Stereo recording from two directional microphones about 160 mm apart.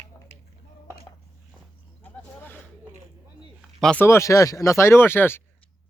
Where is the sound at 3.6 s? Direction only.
5° left (ahead or behind).